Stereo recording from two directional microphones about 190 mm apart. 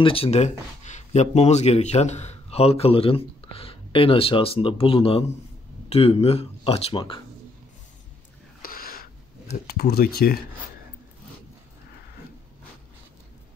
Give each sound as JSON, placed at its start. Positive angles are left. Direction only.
{"t": 0.0, "sound": "speech", "side_deg": 30}
{"t": 8.6, "sound": "a sound", "side_deg": 50}
{"t": 9.7, "sound": "speech", "side_deg": 55}